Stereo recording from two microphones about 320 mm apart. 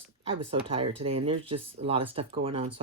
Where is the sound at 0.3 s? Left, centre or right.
Centre.